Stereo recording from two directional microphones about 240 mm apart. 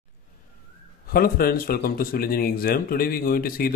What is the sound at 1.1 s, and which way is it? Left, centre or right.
Speech, left.